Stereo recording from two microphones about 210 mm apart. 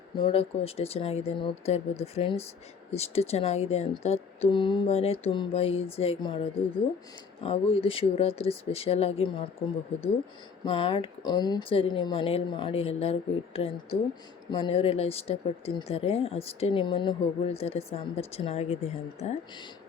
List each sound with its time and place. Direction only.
0.2 s speech: 25° left (ahead or behind)
10.7 s speech: 25° left (ahead or behind)